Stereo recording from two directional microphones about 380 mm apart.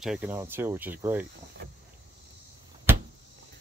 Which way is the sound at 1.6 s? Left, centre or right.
Right.